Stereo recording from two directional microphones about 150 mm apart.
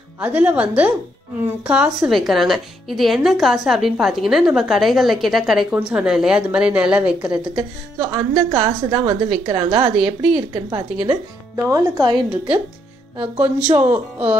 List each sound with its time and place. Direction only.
0.2 s speech: 10° right (ahead or behind)
7.5 s a woman's voice: 25° right (ahead or behind)
11.5 s a woman's voice: 20° right (ahead or behind)
13.4 s speech: 10° right (ahead or behind)